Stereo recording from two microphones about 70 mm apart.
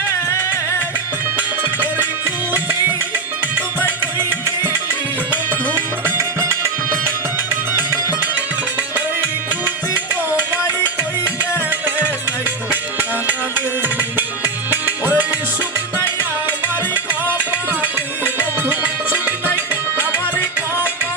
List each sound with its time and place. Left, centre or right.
2.2 s music: right
11.5 s music: right
13.8 s music: right
16.9 s music: right